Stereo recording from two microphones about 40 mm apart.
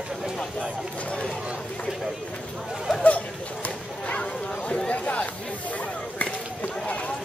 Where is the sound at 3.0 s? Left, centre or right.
Left.